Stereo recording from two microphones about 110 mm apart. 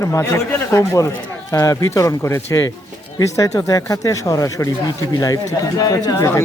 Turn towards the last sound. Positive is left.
turn(degrees=35)  # may be behind; listen again after turning